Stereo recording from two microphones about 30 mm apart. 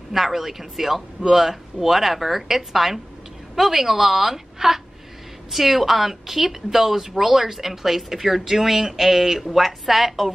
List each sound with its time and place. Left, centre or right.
0.1 s a woman's voice: centre